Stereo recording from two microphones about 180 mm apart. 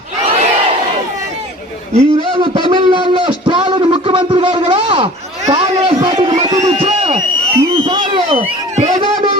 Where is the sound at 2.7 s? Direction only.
25° right (ahead or behind).